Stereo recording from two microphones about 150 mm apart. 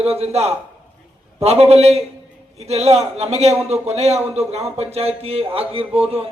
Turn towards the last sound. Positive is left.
turn(degrees=-40)  # may be behind; listen again after turning